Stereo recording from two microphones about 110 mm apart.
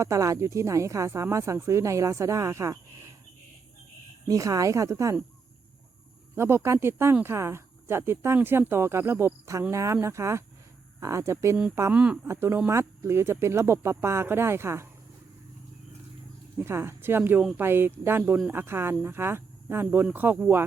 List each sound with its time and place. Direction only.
0.0 s speech: 30° right (ahead or behind)
4.3 s speech: 30° right (ahead or behind)
6.3 s speech: 25° right (ahead or behind)
11.9 s speech: 10° right (ahead or behind)
12.3 s speech: 25° right (ahead or behind)
16.6 s speech: 20° right (ahead or behind)